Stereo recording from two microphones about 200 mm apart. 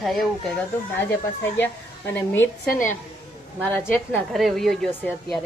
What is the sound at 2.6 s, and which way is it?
Speech, 45° left (ahead or behind).